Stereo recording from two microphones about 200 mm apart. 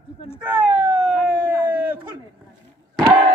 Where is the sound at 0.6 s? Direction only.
10° right (ahead or behind).